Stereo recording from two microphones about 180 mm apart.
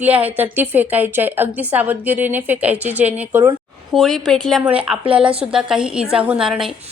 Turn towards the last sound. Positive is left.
turn(degrees=0)  # may be behind; listen again after turning